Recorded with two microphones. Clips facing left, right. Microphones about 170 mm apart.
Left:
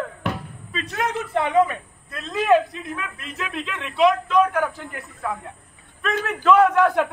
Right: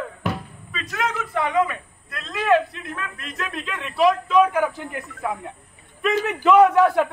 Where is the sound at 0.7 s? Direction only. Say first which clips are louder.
Left 1 dB; 30° left (ahead or behind).